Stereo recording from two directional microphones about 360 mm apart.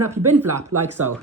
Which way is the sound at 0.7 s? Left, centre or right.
Right.